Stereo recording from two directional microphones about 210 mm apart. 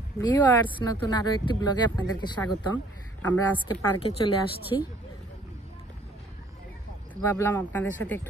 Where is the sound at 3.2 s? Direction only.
10° left (ahead or behind).